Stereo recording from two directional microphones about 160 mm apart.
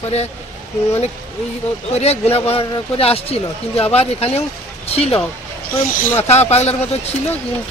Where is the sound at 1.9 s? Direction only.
40° left (ahead or behind).